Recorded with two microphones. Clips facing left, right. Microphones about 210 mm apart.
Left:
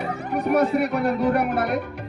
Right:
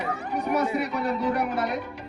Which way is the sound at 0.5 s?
55° left (ahead or behind).